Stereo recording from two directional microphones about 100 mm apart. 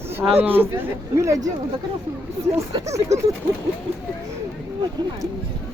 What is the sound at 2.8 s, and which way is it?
Speech, 30° right (ahead or behind).